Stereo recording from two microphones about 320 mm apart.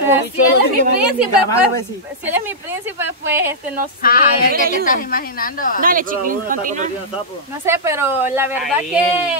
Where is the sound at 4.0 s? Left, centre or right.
Left.